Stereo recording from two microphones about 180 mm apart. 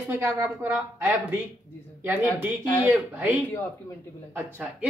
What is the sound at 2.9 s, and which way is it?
Speech, 10° right (ahead or behind).